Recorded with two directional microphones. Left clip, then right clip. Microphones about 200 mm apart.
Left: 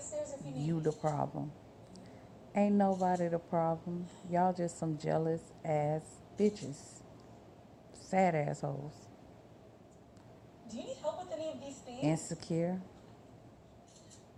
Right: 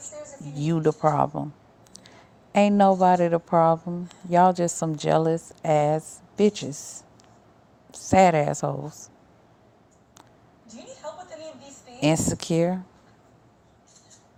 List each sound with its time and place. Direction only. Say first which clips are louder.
0.6 s a woman's voice: right 13 dB; 50° right (ahead or behind)
8.0 s a woman's voice: right 13 dB; 55° right (ahead or behind)
11.9 s a woman's voice: right 13 dB; 55° right (ahead or behind)